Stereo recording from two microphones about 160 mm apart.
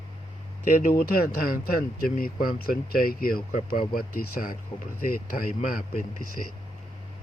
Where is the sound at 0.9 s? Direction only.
70° left (ahead or behind).